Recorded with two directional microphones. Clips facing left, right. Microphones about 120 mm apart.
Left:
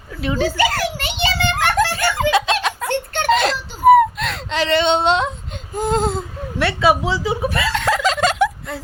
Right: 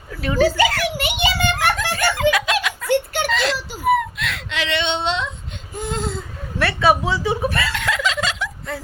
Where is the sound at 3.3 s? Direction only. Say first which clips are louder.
Left 9 dB; 50° left (ahead or behind).